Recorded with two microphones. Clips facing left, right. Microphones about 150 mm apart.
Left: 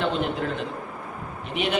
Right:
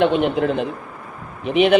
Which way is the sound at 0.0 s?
70° right (ahead or behind).